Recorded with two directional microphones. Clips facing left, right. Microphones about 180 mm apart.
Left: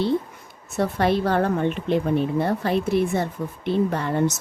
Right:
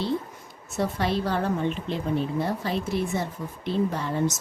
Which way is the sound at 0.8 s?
60° left (ahead or behind).